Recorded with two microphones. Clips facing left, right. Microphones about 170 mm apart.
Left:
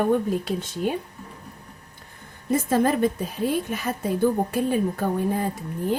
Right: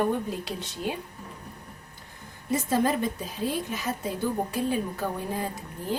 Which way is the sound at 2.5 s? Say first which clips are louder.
Left 4 dB; 55° left (ahead or behind).